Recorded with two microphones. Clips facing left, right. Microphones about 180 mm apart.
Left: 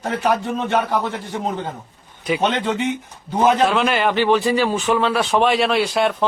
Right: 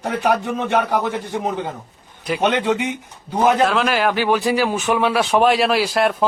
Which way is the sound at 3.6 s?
Centre (ahead or behind).